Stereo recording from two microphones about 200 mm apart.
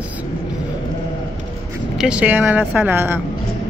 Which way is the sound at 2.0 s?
5° right (ahead or behind).